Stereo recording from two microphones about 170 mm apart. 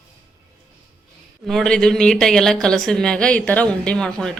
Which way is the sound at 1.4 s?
Centre (ahead or behind).